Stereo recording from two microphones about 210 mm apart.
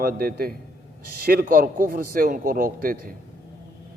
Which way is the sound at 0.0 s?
45° right (ahead or behind).